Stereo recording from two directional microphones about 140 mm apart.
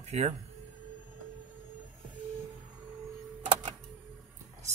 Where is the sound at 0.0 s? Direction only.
50° right (ahead or behind).